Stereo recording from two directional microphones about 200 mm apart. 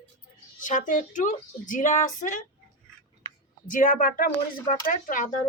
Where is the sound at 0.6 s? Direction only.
40° left (ahead or behind).